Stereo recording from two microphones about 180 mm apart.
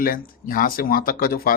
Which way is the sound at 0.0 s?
50° left (ahead or behind).